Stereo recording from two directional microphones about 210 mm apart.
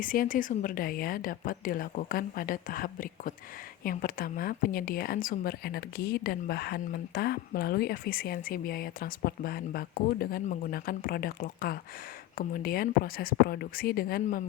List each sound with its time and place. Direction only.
0.0 s a woman's voice: 40° left (ahead or behind)